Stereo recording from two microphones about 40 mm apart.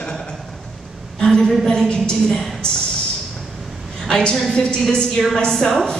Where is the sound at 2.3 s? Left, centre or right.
Centre.